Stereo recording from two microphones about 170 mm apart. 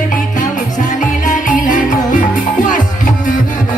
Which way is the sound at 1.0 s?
50° left (ahead or behind).